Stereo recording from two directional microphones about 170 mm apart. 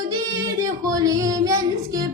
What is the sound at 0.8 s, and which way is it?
Female singing, 20° right (ahead or behind).